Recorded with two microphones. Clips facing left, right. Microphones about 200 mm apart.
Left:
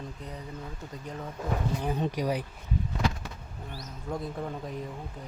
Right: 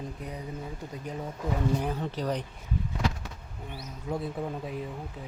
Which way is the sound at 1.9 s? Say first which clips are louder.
Left 2 dB; 15° left (ahead or behind).